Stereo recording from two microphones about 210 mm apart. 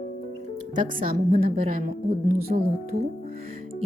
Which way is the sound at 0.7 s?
40° right (ahead or behind).